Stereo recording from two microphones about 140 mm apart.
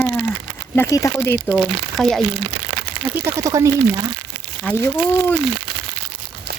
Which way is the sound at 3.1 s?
20° right (ahead or behind).